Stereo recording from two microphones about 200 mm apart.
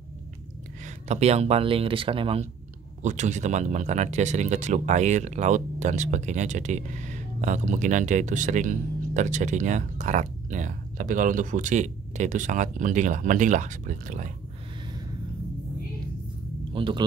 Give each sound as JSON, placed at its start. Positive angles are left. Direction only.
{"t": 0.8, "sound": "speech", "side_deg": -35}
{"t": 16.7, "sound": "speech", "side_deg": -25}